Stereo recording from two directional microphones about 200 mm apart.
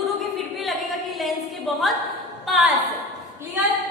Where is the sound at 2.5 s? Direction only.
Centre (ahead or behind).